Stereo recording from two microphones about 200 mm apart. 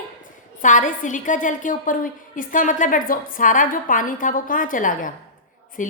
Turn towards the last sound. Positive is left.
turn(degrees=40)  # may be behind; listen again after turning